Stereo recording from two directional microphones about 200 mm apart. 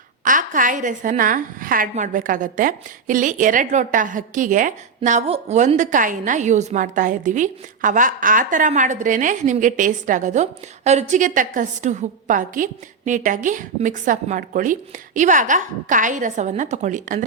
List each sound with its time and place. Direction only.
0.3 s a woman's voice: 40° right (ahead or behind)